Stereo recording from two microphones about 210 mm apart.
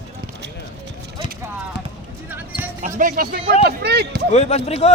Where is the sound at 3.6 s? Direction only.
50° right (ahead or behind).